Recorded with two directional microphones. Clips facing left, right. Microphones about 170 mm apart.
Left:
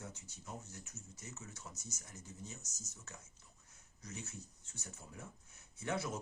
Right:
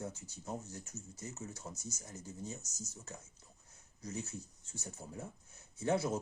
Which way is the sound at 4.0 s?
35° right (ahead or behind).